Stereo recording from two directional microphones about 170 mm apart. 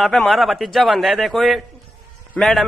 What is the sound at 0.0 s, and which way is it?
A man's voice, centre (ahead or behind).